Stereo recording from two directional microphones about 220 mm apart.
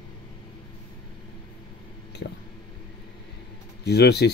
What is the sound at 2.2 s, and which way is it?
Speech, 45° left (ahead or behind).